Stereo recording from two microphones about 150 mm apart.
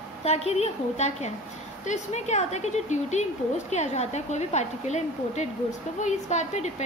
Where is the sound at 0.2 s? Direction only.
45° left (ahead or behind).